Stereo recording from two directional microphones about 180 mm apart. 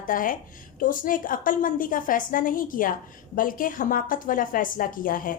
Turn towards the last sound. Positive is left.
turn(degrees=50)  # may be behind; listen again after turning